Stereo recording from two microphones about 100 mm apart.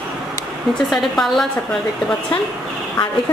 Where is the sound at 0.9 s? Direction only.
5° left (ahead or behind).